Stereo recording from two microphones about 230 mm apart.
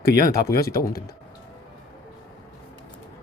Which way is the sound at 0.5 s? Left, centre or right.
Left.